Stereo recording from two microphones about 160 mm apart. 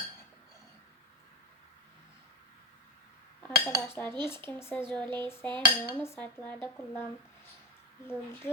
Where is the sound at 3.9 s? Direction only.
10° left (ahead or behind).